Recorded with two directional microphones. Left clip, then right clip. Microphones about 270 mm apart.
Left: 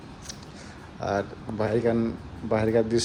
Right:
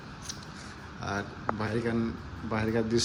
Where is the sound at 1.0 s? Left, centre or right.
Centre.